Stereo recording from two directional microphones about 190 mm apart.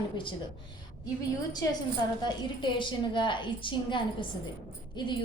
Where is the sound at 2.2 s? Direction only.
25° left (ahead or behind).